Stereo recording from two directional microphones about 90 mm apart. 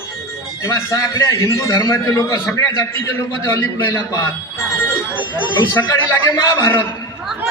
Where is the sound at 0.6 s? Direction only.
35° left (ahead or behind).